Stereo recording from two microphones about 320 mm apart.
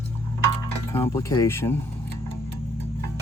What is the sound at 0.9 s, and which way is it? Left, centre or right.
Speech, centre.